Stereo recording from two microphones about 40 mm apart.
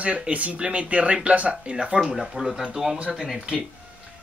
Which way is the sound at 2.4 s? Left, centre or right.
Centre.